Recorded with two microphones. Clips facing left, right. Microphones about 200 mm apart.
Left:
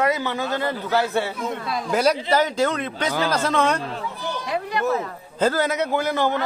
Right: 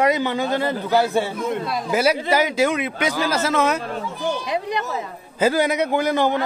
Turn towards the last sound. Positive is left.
turn(degrees=-15)  # may be behind; listen again after turning